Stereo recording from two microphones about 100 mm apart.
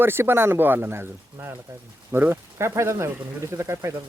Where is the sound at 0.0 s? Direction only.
20° right (ahead or behind).